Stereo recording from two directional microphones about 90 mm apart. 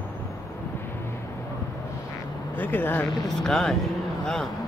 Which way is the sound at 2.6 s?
20° left (ahead or behind).